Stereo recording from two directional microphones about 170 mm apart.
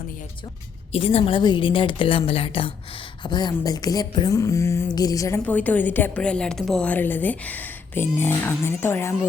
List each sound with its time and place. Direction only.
0.9 s a woman's voice: 35° left (ahead or behind); by 9.1 s 15° left (ahead or behind)